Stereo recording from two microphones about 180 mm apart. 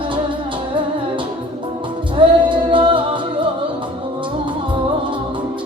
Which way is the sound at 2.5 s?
25° right (ahead or behind).